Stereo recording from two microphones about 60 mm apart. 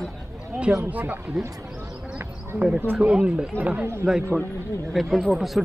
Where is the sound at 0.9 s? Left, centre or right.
Right.